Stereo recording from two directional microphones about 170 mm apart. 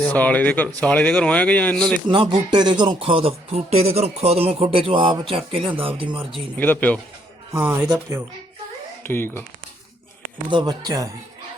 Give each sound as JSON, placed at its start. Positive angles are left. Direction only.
{"t": 0.0, "sound": "speech", "side_deg": 10}
{"t": 2.0, "sound": "speech", "side_deg": -30}
{"t": 6.6, "sound": "speech", "side_deg": 10}
{"t": 7.5, "sound": "speech", "side_deg": -10}
{"t": 9.0, "sound": "speech", "side_deg": 15}
{"t": 10.5, "sound": "speech", "side_deg": -25}